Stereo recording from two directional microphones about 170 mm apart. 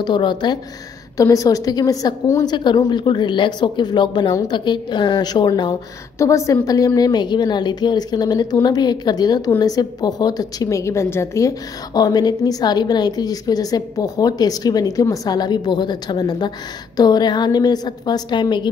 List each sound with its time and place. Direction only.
0.0 s a woman's voice: 25° left (ahead or behind)